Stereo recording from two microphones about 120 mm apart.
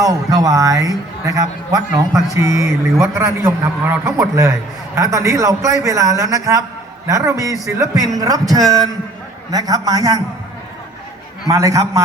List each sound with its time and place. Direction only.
0.0 s a man's voice: 30° right (ahead or behind)
11.5 s a man's voice: 30° right (ahead or behind)